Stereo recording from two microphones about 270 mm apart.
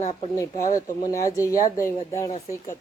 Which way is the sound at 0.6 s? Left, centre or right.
Centre.